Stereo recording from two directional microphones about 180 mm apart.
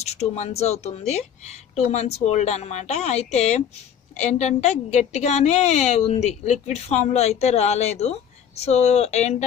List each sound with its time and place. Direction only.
0.0 s a woman's voice: 35° left (ahead or behind)